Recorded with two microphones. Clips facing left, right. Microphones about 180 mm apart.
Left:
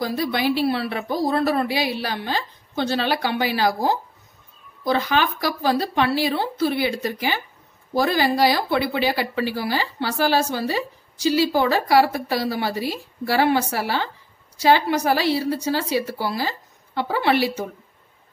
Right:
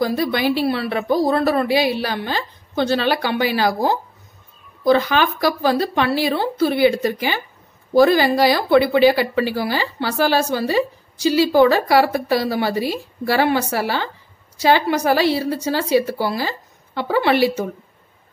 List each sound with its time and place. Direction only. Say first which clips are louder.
0.0 s a woman's voice: right 4 dB; 65° right (ahead or behind); by 17.4 s 85° right